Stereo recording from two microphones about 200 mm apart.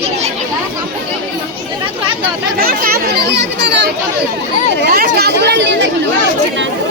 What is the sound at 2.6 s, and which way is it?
Speech, 50° right (ahead or behind).